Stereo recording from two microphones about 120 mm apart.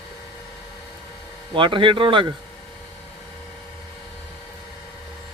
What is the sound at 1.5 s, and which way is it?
Speech, 45° right (ahead or behind).